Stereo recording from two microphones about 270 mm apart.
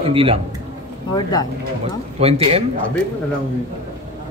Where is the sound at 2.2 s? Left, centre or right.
Right.